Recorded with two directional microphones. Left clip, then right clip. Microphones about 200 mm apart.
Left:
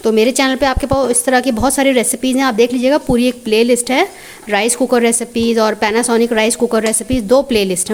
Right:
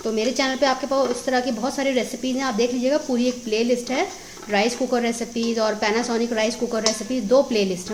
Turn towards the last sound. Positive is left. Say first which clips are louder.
# left 6 dB
turn(degrees=45)  # may be behind; listen again after turning